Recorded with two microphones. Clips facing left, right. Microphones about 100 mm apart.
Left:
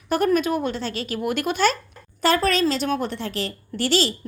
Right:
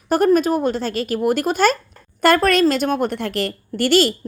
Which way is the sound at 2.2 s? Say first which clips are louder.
Right 5 dB; 60° right (ahead or behind).